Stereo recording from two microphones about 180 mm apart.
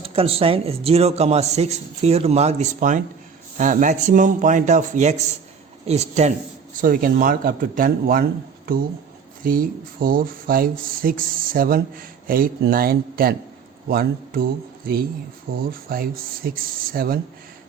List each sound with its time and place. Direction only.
0.0 s a man's voice: 30° right (ahead or behind)
6.7 s speech: 50° right (ahead or behind)